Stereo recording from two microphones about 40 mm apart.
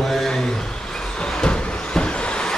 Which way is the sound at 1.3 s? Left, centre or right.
Left.